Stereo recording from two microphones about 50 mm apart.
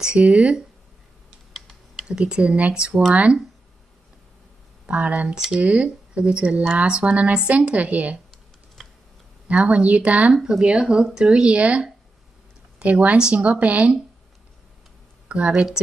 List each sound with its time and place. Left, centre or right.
0.0 s speech: right
2.0 s speech: centre
4.8 s speech: right
5.3 s speech: centre
9.5 s speech: right
10.3 s speech: centre; by 13.9 s right
15.2 s speech: right